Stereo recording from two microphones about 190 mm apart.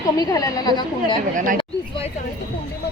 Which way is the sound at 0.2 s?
20° left (ahead or behind).